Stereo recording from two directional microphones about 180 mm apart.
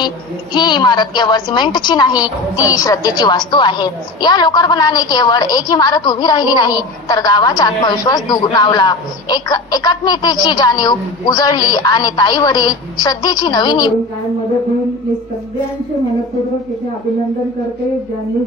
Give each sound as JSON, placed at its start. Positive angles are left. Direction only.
{"t": 0.0, "sound": "a woman's voice", "side_deg": 25}
{"t": 2.1, "sound": "a child's voice", "side_deg": -5}
{"t": 2.6, "sound": "a woman's voice", "side_deg": 20}